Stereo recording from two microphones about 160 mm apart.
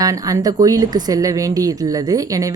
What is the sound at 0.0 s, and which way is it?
Speech, 20° right (ahead or behind).